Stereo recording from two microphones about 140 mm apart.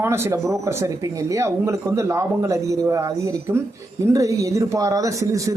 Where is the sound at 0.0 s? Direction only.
20° right (ahead or behind).